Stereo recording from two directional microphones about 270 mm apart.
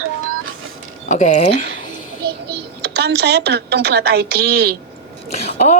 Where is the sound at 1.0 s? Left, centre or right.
Left.